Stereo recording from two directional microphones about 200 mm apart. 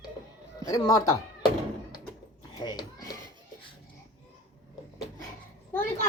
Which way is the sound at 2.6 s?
20° left (ahead or behind).